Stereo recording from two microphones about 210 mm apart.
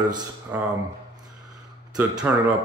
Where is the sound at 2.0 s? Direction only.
5° right (ahead or behind).